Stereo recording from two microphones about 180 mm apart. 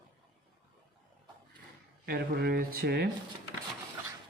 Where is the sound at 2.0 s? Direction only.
60° right (ahead or behind).